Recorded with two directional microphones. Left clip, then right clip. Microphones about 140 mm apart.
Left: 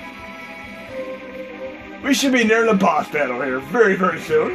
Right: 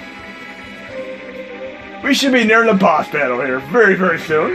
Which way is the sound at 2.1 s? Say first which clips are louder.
Right 4 dB; 60° right (ahead or behind).